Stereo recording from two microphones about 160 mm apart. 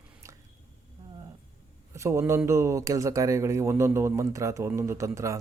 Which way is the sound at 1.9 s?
15° right (ahead or behind).